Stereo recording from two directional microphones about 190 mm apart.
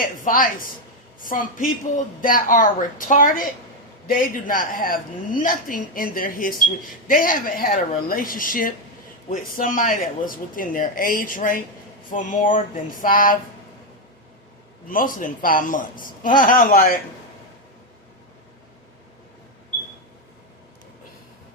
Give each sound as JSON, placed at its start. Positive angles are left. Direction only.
{"t": 0.3, "sound": "a woman's voice", "side_deg": 45}
{"t": 14.8, "sound": "a woman's voice", "side_deg": 45}